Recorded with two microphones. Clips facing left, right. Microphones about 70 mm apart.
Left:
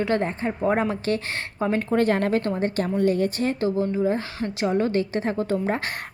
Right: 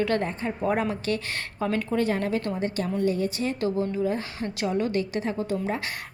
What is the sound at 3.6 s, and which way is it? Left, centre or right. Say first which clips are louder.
A woman's voice: left 3 dB; left.